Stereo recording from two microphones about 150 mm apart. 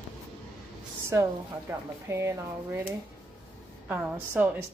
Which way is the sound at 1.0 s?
20° right (ahead or behind).